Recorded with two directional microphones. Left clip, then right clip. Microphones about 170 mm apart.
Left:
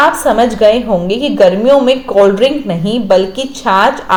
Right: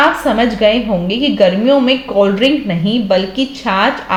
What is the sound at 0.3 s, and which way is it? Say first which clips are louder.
A woman's voice: left 4 dB; 25° left (ahead or behind).